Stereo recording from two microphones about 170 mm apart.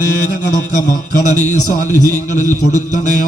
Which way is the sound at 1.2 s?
50° left (ahead or behind).